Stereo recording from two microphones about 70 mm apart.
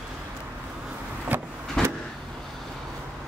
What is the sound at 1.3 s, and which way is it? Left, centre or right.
Vehicle, right.